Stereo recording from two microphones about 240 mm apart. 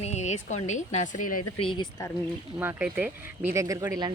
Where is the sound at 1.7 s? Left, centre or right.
Centre.